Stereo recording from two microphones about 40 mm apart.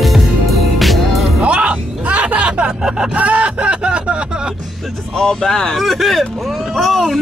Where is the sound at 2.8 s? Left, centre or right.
Centre.